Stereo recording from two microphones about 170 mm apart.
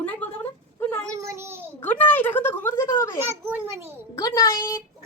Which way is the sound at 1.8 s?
10° left (ahead or behind).